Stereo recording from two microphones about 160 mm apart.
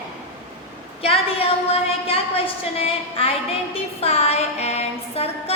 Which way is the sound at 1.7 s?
35° left (ahead or behind).